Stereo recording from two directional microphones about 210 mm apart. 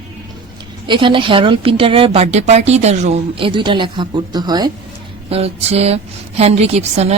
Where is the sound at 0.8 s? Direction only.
25° right (ahead or behind).